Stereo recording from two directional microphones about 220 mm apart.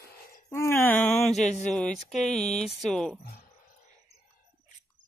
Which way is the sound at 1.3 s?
30° left (ahead or behind).